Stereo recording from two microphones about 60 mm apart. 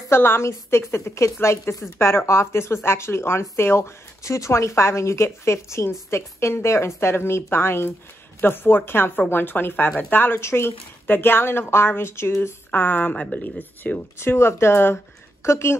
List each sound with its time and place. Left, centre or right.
0.1 s speech: left
12.7 s speech: left
13.1 s speech: centre
13.4 s speech: left
14.1 s speech: left